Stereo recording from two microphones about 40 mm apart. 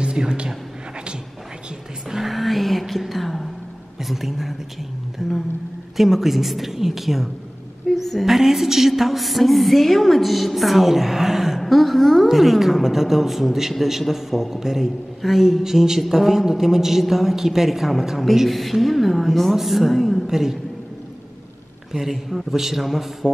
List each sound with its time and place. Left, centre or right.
0.0 s speech: right
2.0 s a sound: centre
4.0 s a woman's voice: centre
11.6 s a woman's voice: centre
21.9 s a woman's voice: centre